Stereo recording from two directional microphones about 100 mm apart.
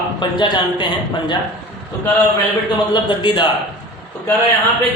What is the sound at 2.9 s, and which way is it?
Speech, 55° left (ahead or behind).